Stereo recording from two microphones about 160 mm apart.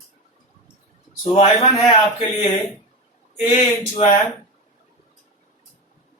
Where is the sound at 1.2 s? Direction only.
40° left (ahead or behind).